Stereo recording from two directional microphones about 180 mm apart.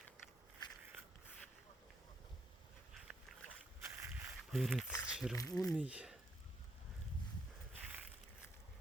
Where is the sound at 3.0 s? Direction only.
Centre (ahead or behind).